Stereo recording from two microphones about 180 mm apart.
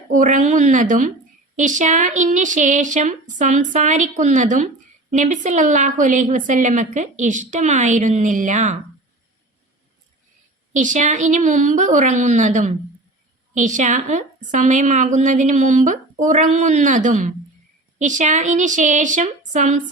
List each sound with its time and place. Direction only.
0.1 s a woman's voice: 45° right (ahead or behind)
10.8 s a woman's voice: 45° right (ahead or behind)